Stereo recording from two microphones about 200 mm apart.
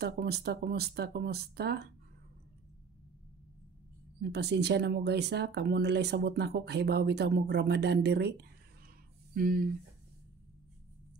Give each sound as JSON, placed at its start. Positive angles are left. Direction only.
{"t": 0.0, "sound": "speech", "side_deg": -55}
{"t": 4.2, "sound": "speech", "side_deg": -55}